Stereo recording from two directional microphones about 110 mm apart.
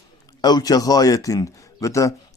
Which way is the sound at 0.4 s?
35° left (ahead or behind).